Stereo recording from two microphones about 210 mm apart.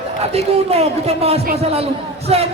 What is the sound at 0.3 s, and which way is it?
A man's voice, 30° right (ahead or behind).